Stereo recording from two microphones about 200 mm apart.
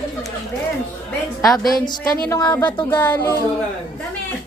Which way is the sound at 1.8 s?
20° left (ahead or behind).